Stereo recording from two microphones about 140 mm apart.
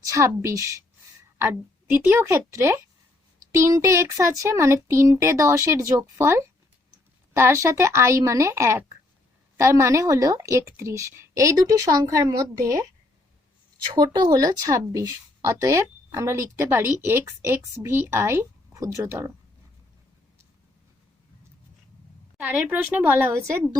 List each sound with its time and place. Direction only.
0.0 s speech: 20° right (ahead or behind)
2.5 s speech: 20° right (ahead or behind)
22.4 s speech: 10° right (ahead or behind)